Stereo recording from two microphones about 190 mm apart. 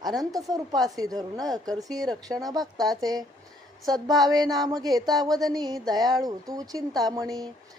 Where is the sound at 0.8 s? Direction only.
20° right (ahead or behind).